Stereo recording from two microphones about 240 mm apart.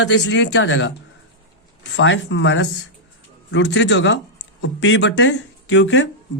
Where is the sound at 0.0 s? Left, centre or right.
Left.